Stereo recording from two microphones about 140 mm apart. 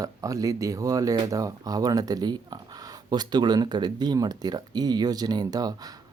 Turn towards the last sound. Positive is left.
turn(degrees=-25)  # may be behind; listen again after turning